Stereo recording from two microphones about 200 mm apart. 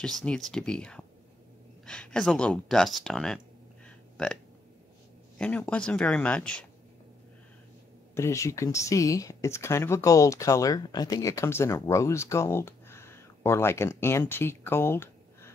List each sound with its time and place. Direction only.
0.0 s speech: 5° left (ahead or behind)
5.4 s speech: 5° left (ahead or behind)
8.1 s speech: 15° left (ahead or behind)